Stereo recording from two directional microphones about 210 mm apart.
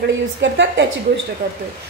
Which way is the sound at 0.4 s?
60° right (ahead or behind).